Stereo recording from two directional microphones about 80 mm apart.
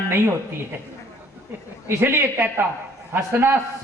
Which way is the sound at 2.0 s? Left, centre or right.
Right.